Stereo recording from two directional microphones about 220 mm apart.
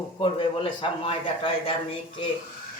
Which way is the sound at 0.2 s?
25° left (ahead or behind).